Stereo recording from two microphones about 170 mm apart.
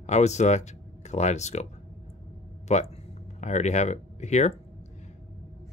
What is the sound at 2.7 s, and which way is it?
Speech, 45° left (ahead or behind).